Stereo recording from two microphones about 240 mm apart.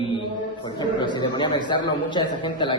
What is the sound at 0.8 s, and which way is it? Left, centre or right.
A man's voice, centre.